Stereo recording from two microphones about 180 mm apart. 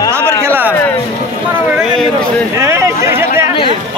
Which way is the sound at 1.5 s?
5° right (ahead or behind).